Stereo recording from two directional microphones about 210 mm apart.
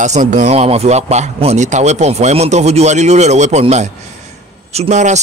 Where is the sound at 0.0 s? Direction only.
35° right (ahead or behind).